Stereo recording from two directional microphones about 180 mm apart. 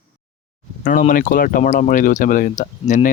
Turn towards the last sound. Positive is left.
turn(degrees=45)  # may be behind; listen again after turning